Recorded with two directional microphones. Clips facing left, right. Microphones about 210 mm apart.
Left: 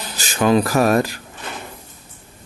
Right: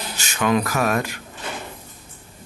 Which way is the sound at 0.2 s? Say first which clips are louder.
Left 5 dB; 35° left (ahead or behind).